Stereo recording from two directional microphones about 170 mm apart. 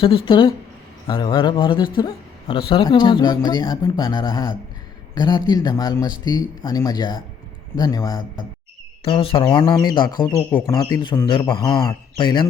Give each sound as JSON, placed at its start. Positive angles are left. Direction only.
{"t": 0.0, "sound": "a man's voice", "side_deg": 35}